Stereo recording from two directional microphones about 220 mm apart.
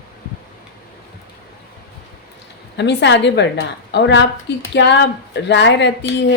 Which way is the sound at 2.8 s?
50° left (ahead or behind).